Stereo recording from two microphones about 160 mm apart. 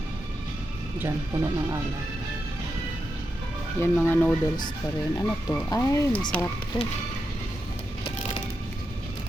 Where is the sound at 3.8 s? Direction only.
10° left (ahead or behind).